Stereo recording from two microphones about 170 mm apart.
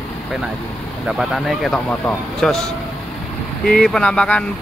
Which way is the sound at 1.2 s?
Centre (ahead or behind).